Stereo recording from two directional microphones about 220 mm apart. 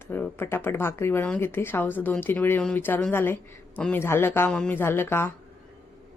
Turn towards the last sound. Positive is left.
turn(degrees=10)  # may be behind; listen again after turning